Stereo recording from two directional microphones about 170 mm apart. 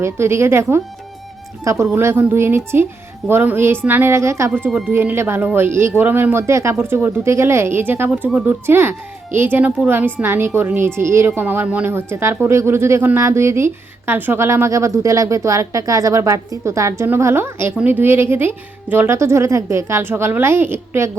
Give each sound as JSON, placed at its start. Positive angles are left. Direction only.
{"t": 0.0, "sound": "a woman's voice", "side_deg": -15}